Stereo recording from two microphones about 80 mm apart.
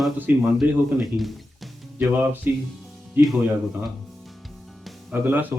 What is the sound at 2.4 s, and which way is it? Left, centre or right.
Speech, right.